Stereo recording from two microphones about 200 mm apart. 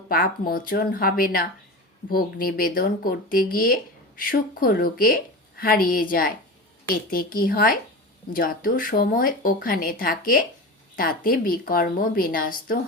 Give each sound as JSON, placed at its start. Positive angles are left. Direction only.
{"t": 0.1, "sound": "speech", "side_deg": 45}